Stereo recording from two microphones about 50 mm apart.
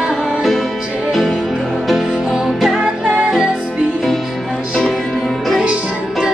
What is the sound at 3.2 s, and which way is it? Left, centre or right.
Music, centre.